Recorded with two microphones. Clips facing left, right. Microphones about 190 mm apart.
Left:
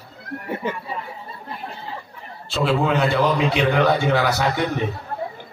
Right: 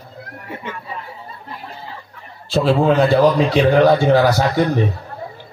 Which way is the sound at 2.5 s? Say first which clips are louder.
Right 5 dB; 35° right (ahead or behind).